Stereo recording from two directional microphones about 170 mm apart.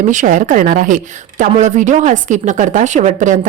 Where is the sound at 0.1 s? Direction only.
45° right (ahead or behind).